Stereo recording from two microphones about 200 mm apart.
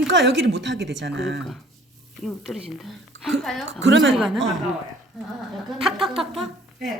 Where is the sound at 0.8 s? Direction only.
Centre (ahead or behind).